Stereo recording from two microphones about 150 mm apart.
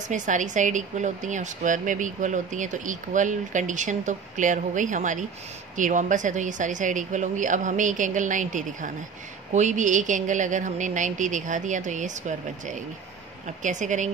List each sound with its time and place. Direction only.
0.1 s speech: 55° right (ahead or behind)